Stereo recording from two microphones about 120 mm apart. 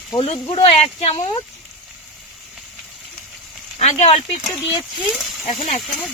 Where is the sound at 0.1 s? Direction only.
45° left (ahead or behind); by 1.1 s 60° left (ahead or behind).